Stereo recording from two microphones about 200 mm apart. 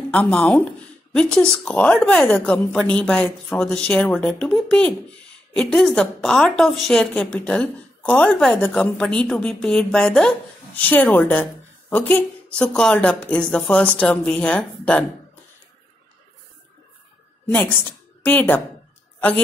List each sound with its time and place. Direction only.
0.1 s a woman's voice: 5° left (ahead or behind)
17.5 s a woman's voice: 10° left (ahead or behind)